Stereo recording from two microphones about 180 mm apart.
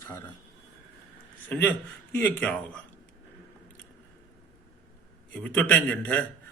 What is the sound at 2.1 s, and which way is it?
Speech, 10° left (ahead or behind).